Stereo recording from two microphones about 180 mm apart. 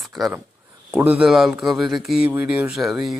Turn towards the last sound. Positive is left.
turn(degrees=0)  # may be behind; listen again after turning